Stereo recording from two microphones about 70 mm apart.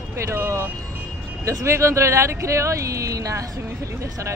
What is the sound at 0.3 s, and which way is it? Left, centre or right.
Speech, right.